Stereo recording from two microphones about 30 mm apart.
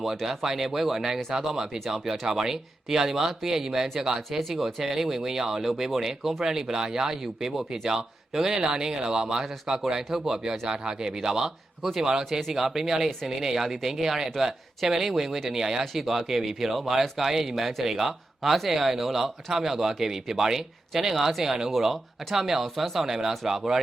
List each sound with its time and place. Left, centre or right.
0.0 s speech: centre
14.8 s speech: centre
21.7 s speech: centre
23.0 s speech: centre